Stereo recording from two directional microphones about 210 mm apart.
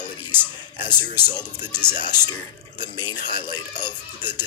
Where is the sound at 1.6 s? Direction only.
10° right (ahead or behind).